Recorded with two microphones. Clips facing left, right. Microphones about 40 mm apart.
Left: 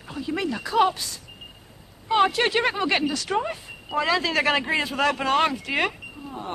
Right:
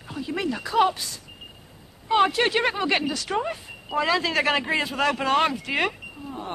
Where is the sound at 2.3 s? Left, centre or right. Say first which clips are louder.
Even; centre.